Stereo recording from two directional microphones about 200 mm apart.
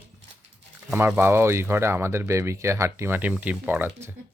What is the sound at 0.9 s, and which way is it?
Speech, 10° right (ahead or behind).